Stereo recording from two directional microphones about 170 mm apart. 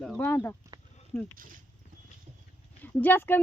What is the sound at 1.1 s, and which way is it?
Speech, 5° left (ahead or behind).